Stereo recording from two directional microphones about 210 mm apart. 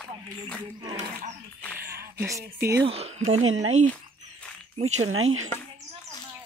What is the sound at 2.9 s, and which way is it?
Speech, 30° right (ahead or behind).